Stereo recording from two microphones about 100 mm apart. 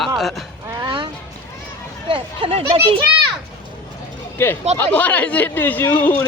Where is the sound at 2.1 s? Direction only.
65° right (ahead or behind).